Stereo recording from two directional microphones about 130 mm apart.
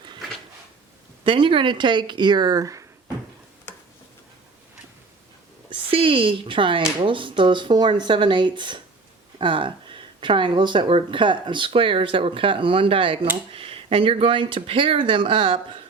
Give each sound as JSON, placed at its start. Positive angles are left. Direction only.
{"t": 1.2, "sound": "speech", "side_deg": -40}
{"t": 5.7, "sound": "speech", "side_deg": -45}